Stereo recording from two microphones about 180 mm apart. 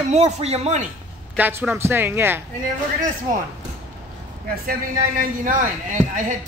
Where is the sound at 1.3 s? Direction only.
10° right (ahead or behind).